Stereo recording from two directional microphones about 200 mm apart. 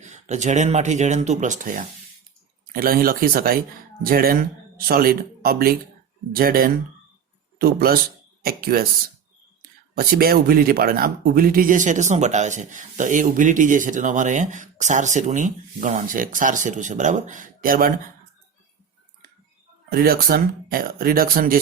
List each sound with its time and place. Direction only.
0.0 s speech: 35° right (ahead or behind)
10.0 s speech: 50° right (ahead or behind)
19.9 s speech: 50° right (ahead or behind)